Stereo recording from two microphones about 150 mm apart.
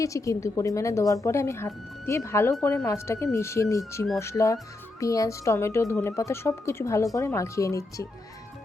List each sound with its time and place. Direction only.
0.0 s a woman's voice: 20° left (ahead or behind)